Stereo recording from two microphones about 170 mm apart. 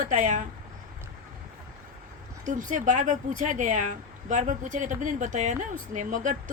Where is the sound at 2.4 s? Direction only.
45° right (ahead or behind).